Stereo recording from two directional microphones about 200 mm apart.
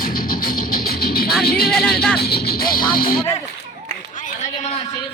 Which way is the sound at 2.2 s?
50° left (ahead or behind).